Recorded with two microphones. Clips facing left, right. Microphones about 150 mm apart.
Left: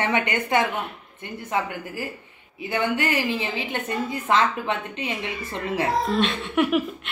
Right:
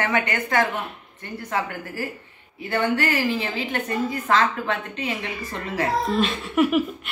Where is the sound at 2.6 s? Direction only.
15° left (ahead or behind).